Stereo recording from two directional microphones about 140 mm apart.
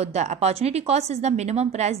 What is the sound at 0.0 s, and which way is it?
Speech, 55° right (ahead or behind).